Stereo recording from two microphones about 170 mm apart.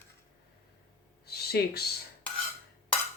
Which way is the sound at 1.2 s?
70° left (ahead or behind).